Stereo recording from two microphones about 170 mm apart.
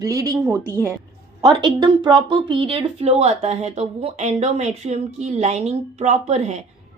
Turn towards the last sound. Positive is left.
turn(degrees=-40)  # may be behind; listen again after turning